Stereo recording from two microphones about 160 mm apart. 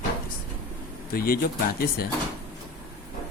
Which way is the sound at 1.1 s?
65° left (ahead or behind).